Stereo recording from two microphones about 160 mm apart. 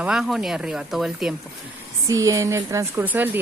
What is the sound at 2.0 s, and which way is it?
Speech, 20° right (ahead or behind).